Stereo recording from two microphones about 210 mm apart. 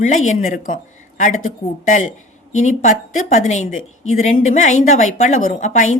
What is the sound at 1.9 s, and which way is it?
A woman's voice, 40° left (ahead or behind).